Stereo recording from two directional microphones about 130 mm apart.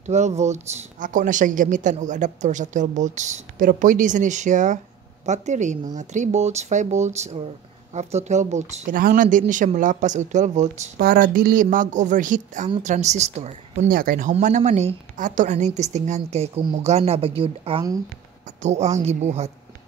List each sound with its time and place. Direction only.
0.0 s a woman's voice: 60° right (ahead or behind); by 14.3 s 90° right
14.3 s a woman's voice: 70° right (ahead or behind); by 17.8 s 45° right (ahead or behind)
18.6 s a woman's voice: 60° right (ahead or behind)